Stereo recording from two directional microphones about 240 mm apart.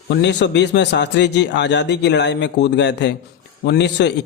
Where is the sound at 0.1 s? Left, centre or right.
Left.